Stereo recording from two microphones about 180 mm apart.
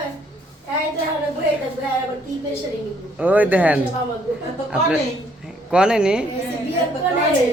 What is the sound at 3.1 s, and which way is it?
Speech, 10° right (ahead or behind).